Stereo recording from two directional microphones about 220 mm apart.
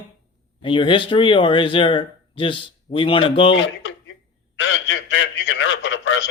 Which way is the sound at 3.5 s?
55° left (ahead or behind).